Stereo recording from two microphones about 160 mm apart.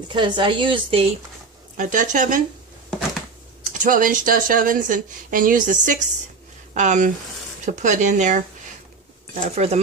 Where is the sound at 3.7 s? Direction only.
55° right (ahead or behind).